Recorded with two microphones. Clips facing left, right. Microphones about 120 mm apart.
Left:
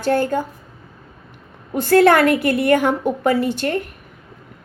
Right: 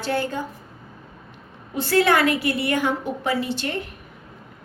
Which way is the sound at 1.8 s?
50° left (ahead or behind).